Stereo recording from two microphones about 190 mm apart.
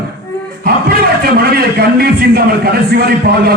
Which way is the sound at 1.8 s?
55° right (ahead or behind).